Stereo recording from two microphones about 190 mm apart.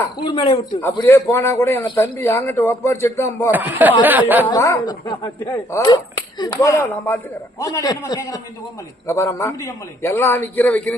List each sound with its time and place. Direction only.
0.3 s a woman's voice: 30° left (ahead or behind)
0.9 s a man's voice: 15° left (ahead or behind)
3.5 s speech: 10° right (ahead or behind)
4.4 s a woman's voice: 20° left (ahead or behind)